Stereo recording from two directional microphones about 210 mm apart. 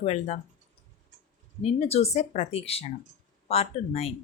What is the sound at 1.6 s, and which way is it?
Speech, 30° left (ahead or behind).